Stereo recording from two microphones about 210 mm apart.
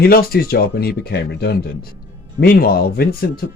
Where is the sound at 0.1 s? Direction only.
45° left (ahead or behind).